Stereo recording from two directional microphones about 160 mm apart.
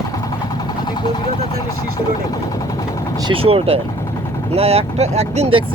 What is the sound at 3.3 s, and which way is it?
Speech, 35° right (ahead or behind).